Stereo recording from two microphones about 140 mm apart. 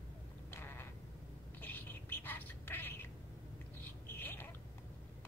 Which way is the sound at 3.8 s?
15° left (ahead or behind).